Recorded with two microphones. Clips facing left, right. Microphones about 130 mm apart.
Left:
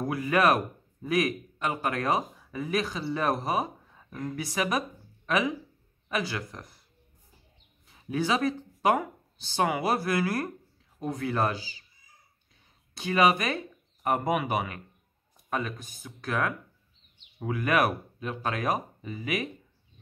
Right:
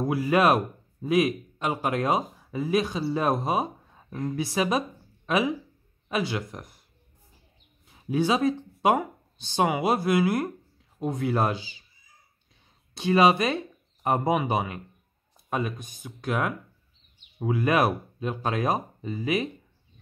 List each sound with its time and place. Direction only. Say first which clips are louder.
0.0 s a man's voice: right 3 dB; 25° right (ahead or behind)
7.9 s a man's voice: right 3 dB; 25° right (ahead or behind)
12.9 s a man's voice: right 3 dB; 25° right (ahead or behind)